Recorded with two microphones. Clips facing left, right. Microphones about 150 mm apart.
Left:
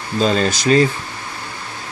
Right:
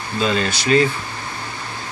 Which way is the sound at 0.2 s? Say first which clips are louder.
Left 4 dB; 40° left (ahead or behind).